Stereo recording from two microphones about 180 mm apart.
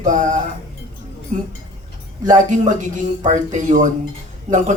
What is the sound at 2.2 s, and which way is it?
A man's voice, 45° right (ahead or behind).